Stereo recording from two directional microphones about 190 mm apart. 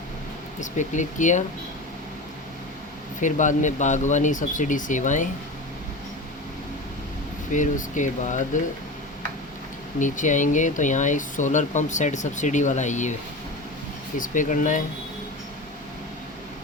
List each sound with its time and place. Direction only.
0.6 s speech: 40° left (ahead or behind)
3.2 s speech: 40° left (ahead or behind)
7.5 s speech: 40° left (ahead or behind)
10.0 s speech: 40° left (ahead or behind)
14.2 s speech: 40° left (ahead or behind)